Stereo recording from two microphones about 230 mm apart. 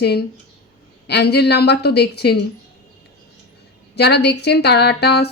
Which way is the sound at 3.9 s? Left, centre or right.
Left.